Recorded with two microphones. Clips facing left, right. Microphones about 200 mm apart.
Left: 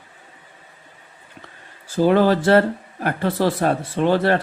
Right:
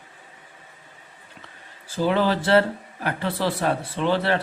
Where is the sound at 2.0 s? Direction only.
45° left (ahead or behind).